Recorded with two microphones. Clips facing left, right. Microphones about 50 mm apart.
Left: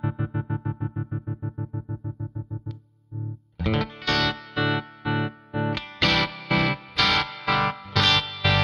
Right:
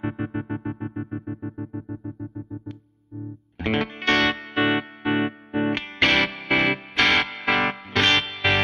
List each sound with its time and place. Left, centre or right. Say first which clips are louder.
0.0 s music: right 2 dB; right
1.6 s music: right 3 dB; right
3.5 s music: right 2 dB; right